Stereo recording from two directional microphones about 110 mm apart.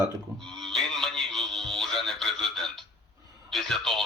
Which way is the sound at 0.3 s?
5° left (ahead or behind).